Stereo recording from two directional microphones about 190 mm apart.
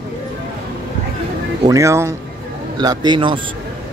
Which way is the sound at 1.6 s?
15° right (ahead or behind).